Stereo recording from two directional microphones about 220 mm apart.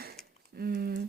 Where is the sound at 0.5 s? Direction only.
45° right (ahead or behind).